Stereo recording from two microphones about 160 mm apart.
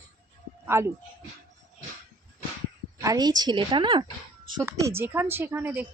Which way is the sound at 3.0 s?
25° right (ahead or behind).